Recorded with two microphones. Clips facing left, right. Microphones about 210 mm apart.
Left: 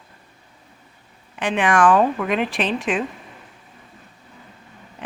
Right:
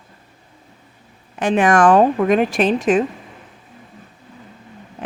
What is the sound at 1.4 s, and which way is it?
Speech, 40° right (ahead or behind).